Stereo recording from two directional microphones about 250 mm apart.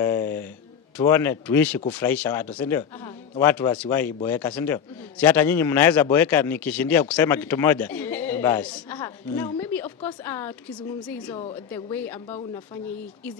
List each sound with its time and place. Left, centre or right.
0.0 s a sound: centre
0.9 s a man's voice: centre
11.2 s a woman's voice: left
11.7 s a man's voice: centre